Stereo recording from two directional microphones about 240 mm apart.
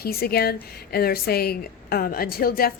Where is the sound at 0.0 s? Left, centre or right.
Left.